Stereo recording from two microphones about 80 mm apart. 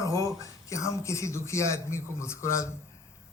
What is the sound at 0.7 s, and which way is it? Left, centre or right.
Speech, left.